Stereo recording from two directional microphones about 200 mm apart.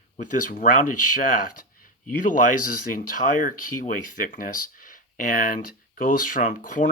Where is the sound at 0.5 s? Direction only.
40° left (ahead or behind).